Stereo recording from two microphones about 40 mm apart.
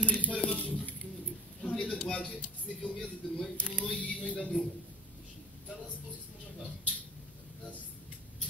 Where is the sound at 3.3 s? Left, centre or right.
Left.